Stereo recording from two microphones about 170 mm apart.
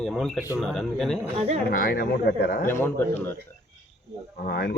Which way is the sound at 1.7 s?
60° left (ahead or behind).